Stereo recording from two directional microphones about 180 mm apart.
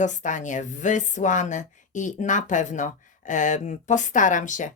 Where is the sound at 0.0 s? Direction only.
45° left (ahead or behind).